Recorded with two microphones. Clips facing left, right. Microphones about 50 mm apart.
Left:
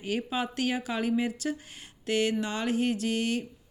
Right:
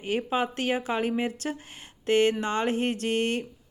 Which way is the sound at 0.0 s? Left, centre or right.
Right.